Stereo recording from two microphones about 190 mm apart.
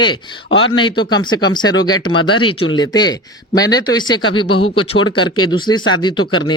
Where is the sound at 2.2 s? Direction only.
25° left (ahead or behind).